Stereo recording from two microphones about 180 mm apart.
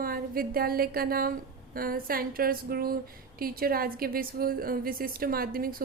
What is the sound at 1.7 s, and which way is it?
Speech, 55° right (ahead or behind).